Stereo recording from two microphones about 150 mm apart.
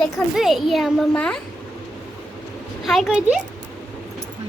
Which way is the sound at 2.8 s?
Centre (ahead or behind).